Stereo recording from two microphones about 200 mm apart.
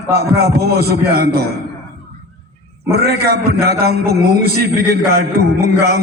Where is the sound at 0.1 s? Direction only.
50° right (ahead or behind).